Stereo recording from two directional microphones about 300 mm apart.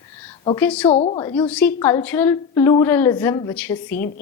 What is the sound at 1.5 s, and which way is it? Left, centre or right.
A woman's voice, centre.